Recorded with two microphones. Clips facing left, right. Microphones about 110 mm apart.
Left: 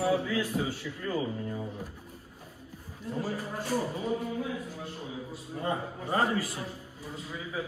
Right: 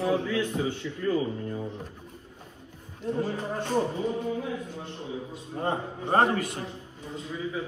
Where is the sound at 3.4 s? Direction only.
25° right (ahead or behind).